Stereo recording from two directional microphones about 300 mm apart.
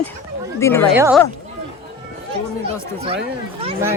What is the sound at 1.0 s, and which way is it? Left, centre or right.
Speech, centre.